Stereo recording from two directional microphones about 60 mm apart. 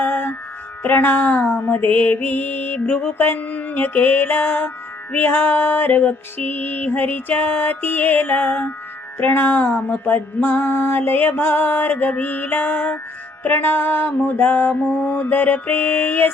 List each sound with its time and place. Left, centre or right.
0.0 s music: left